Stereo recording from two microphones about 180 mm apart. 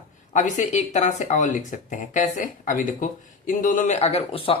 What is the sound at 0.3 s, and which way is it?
Speech, 40° left (ahead or behind).